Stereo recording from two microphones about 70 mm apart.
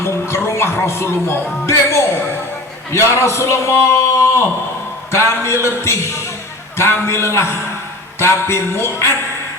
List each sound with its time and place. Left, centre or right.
0.0 s a man's voice: left